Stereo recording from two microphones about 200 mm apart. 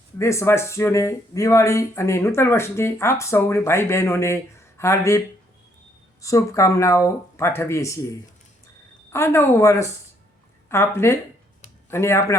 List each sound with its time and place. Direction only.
0.2 s speech: 15° left (ahead or behind)
6.2 s speech: 15° left (ahead or behind)
9.1 s speech: 10° left (ahead or behind)